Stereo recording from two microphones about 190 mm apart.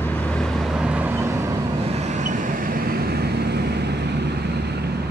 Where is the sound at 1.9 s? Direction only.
40° right (ahead or behind); by 4.4 s 60° right (ahead or behind).